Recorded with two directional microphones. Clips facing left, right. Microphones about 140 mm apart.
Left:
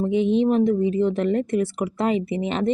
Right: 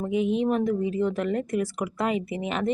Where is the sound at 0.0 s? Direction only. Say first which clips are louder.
Left 5 dB; 25° left (ahead or behind).